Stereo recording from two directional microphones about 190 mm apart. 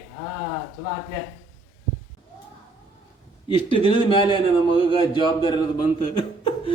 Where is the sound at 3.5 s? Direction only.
25° left (ahead or behind).